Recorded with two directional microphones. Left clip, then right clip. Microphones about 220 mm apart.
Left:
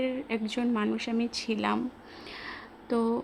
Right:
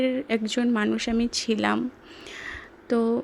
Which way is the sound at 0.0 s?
20° right (ahead or behind).